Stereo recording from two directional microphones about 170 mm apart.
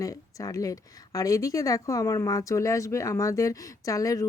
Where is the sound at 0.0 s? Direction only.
20° left (ahead or behind).